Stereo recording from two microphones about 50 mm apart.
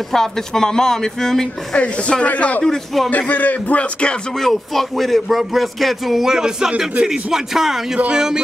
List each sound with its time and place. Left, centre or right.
0.1 s speech: centre
1.8 s speech: left
2.6 s speech: centre
3.1 s speech: left
4.4 s a man's voice: centre